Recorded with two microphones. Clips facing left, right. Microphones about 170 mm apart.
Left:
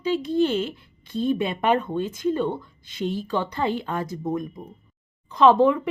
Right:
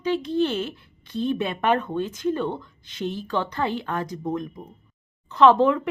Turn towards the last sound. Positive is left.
turn(degrees=10)  # may be behind; listen again after turning